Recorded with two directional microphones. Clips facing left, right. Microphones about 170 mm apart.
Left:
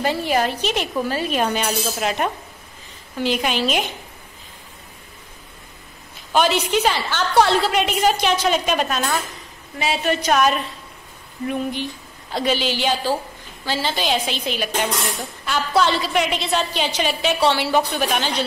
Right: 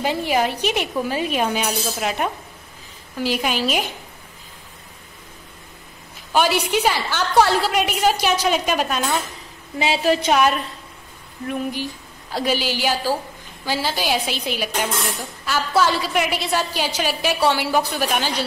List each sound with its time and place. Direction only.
0.0 s a woman's voice: 15° right (ahead or behind)
6.3 s a woman's voice: 10° right (ahead or behind)
9.8 s a woman's voice: 25° right (ahead or behind)
11.7 s a woman's voice: 10° right (ahead or behind)